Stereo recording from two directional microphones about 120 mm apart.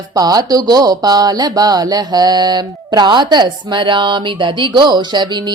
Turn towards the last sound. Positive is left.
turn(degrees=-40)  # may be behind; listen again after turning